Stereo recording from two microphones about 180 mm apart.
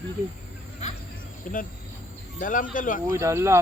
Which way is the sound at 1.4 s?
50° left (ahead or behind).